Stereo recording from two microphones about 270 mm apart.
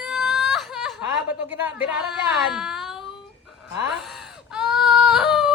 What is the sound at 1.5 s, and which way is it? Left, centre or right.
A woman's voice, centre.